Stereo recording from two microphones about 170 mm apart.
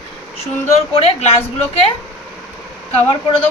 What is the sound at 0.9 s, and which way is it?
Speech, 35° left (ahead or behind).